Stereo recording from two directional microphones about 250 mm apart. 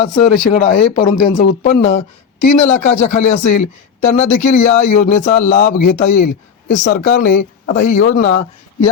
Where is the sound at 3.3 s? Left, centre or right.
Left.